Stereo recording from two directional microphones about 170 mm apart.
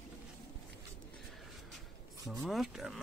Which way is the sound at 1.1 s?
Centre (ahead or behind).